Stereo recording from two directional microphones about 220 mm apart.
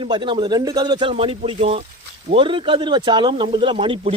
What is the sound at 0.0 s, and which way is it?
Speech, 20° right (ahead or behind).